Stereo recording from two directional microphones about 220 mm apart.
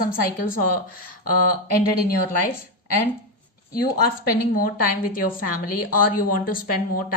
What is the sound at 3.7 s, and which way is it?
A woman's voice, 40° left (ahead or behind).